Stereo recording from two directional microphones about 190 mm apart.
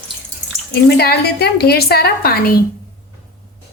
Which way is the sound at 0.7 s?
60° left (ahead or behind).